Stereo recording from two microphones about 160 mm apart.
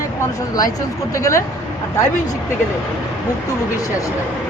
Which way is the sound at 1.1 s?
20° left (ahead or behind).